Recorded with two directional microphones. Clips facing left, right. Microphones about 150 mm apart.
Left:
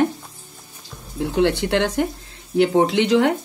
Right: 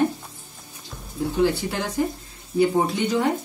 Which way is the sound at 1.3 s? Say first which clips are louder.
Left 4 dB; 85° left.